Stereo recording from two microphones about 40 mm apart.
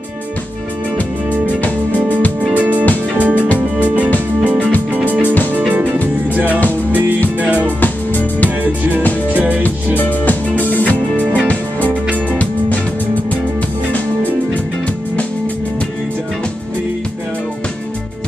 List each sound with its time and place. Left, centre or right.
2.5 s music: right
6.3 s music: right
7.6 s music: left
9.3 s music: right
9.9 s music: left
11.9 s music: right
12.4 s music: left